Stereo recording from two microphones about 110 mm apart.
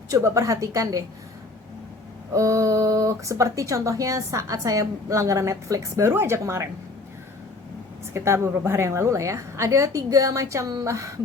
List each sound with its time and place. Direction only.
0.1 s a woman's voice: 30° right (ahead or behind)
2.3 s speech: 30° right (ahead or behind)
8.1 s speech: 25° right (ahead or behind)